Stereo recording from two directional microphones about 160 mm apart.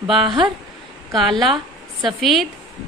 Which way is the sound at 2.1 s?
Centre (ahead or behind).